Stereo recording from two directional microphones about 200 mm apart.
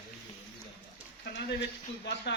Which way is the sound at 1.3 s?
60° left (ahead or behind).